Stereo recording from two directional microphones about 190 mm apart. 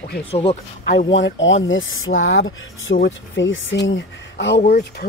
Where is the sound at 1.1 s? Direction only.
80° left.